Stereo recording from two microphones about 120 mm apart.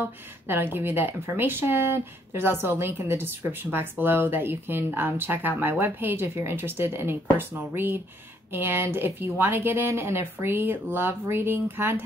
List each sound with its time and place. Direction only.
0.0 s speech: 15° right (ahead or behind)